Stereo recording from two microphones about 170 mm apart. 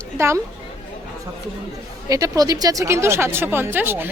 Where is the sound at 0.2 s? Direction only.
15° right (ahead or behind).